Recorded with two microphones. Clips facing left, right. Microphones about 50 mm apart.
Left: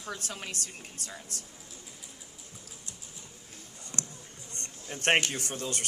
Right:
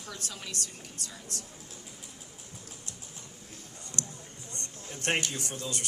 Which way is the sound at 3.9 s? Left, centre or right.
Left.